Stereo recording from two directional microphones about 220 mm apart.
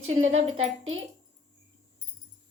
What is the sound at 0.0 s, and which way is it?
Speech, 30° right (ahead or behind).